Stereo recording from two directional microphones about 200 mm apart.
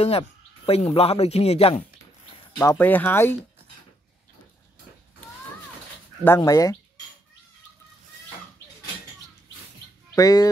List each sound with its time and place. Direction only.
0.7 s speech: 30° left (ahead or behind)
2.6 s speech: 10° left (ahead or behind)
6.2 s speech: 15° left (ahead or behind)
10.1 s speech: 20° left (ahead or behind)